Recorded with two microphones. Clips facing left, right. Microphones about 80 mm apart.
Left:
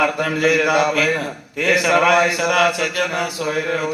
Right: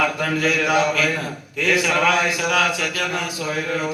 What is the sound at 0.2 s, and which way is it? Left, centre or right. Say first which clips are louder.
Speech: left 4 dB; left.